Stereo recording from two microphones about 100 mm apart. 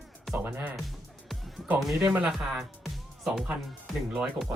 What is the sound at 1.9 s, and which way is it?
Speech, 20° right (ahead or behind).